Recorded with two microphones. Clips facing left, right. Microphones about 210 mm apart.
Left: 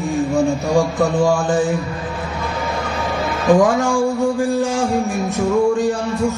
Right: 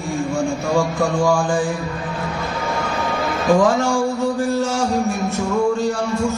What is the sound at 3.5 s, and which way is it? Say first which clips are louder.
Music: left 1 dB; 15° left (ahead or behind).